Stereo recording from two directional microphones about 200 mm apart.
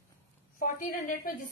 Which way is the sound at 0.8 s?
45° left (ahead or behind).